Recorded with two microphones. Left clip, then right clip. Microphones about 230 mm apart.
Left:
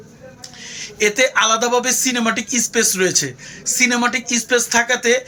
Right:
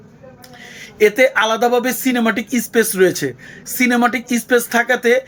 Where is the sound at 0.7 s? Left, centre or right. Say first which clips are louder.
Right 4 dB; centre.